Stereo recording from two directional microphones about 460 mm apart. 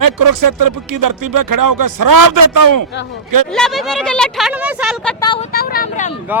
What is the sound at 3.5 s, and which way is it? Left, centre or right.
Speech, centre.